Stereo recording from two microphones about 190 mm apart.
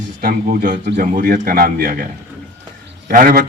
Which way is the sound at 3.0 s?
50° right (ahead or behind).